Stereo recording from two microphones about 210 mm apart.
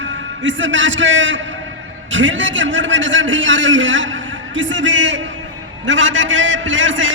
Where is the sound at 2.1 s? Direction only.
65° right (ahead or behind).